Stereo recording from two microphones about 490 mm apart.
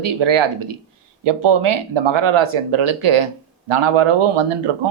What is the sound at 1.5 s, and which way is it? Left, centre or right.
A man's voice, right.